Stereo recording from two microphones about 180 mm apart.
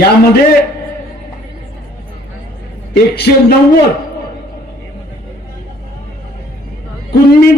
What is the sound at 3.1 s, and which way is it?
Speech, 65° left (ahead or behind).